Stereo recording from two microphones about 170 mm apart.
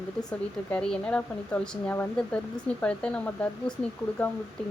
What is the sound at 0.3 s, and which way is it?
Speech, 5° left (ahead or behind).